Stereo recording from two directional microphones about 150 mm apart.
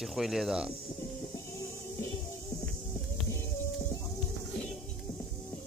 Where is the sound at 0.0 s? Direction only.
Centre (ahead or behind).